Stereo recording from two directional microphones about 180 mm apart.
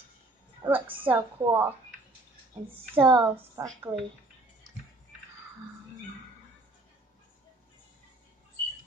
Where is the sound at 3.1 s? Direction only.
15° right (ahead or behind).